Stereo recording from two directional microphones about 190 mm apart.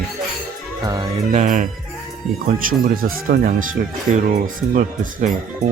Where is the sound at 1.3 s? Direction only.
40° right (ahead or behind).